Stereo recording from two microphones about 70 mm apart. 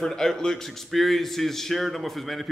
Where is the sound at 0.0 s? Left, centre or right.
Centre.